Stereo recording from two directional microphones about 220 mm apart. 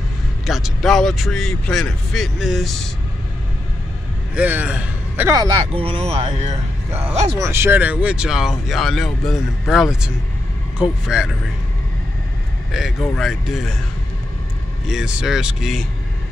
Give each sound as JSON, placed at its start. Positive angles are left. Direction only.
{"t": 0.5, "sound": "speech", "side_deg": 0}
{"t": 4.4, "sound": "a man's voice", "side_deg": -5}
{"t": 6.9, "sound": "speech", "side_deg": -10}
{"t": 12.7, "sound": "speech", "side_deg": 0}
{"t": 14.9, "sound": "speech", "side_deg": -5}